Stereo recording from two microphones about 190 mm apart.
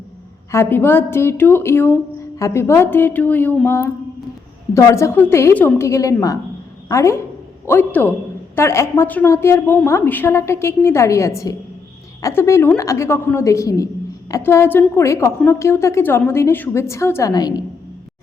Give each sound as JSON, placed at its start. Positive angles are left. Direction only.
{"t": 0.5, "sound": "a woman's voice", "side_deg": 10}